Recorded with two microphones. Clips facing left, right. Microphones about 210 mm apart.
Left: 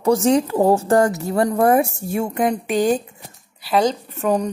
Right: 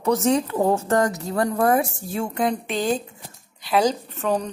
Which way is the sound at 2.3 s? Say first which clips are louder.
Left 3 dB; 15° left (ahead or behind).